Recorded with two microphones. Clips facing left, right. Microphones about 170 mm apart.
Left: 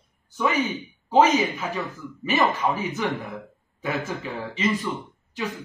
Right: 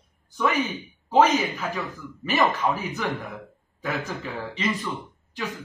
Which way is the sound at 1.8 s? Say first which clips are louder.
Left 2 dB; centre (ahead or behind).